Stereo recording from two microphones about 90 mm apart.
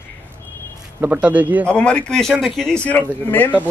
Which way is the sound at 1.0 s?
15° right (ahead or behind).